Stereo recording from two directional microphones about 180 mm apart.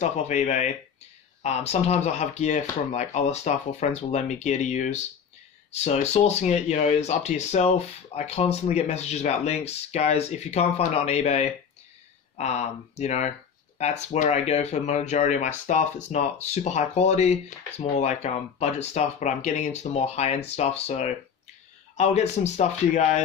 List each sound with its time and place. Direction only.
0.0 s speech: 40° left (ahead or behind)